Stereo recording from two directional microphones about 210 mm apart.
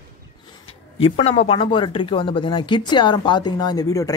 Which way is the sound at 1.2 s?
30° left (ahead or behind).